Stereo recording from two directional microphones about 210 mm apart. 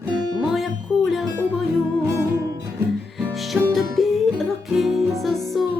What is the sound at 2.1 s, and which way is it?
Music, 15° right (ahead or behind).